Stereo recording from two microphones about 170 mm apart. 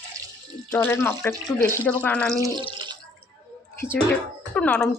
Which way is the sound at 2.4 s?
20° right (ahead or behind).